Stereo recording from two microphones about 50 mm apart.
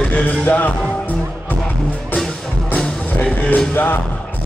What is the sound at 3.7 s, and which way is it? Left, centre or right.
Music, left.